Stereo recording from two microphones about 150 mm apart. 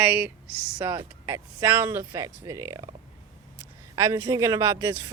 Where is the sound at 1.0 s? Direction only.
20° right (ahead or behind).